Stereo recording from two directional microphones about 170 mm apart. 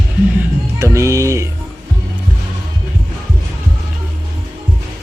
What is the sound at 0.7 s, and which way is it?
Speech, 20° right (ahead or behind).